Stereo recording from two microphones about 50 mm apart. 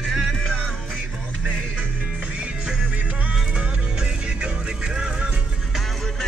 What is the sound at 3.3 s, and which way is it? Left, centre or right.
Music, centre.